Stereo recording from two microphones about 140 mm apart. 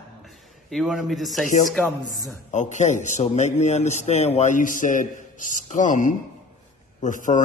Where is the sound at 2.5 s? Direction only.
60° left (ahead or behind).